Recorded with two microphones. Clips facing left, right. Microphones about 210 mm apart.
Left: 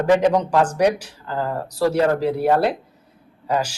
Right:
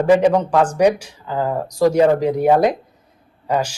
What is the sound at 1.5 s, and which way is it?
Speech, 15° right (ahead or behind).